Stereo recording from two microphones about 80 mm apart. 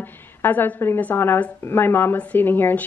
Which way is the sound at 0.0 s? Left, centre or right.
Left.